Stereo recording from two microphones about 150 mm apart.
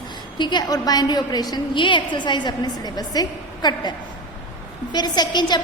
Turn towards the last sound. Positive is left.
turn(degrees=30)  # may be behind; listen again after turning